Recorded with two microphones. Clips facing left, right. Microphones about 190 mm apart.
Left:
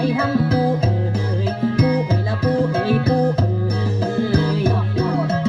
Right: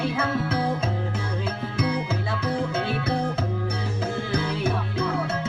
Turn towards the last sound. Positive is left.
turn(degrees=40)  # may be behind; listen again after turning